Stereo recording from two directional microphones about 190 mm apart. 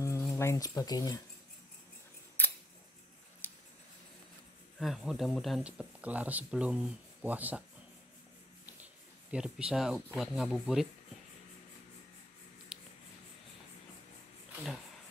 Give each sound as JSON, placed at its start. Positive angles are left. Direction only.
{"t": 0.0, "sound": "speech", "side_deg": 15}
{"t": 2.4, "sound": "scissors", "side_deg": 10}
{"t": 3.4, "sound": "a sound", "side_deg": 10}
{"t": 4.7, "sound": "speech", "side_deg": 0}
{"t": 9.3, "sound": "speech", "side_deg": -5}
{"t": 14.5, "sound": "a sound", "side_deg": 0}